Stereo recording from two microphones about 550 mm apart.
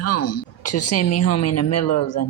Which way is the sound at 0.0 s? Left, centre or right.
Left.